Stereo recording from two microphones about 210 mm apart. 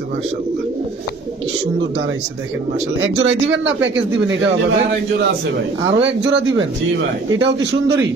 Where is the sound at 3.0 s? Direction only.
65° right (ahead or behind).